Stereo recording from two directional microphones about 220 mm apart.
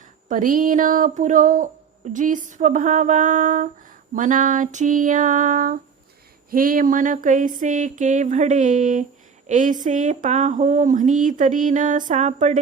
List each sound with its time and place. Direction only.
0.3 s speech: 40° right (ahead or behind)